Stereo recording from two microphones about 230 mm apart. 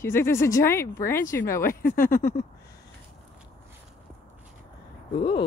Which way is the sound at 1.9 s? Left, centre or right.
Left.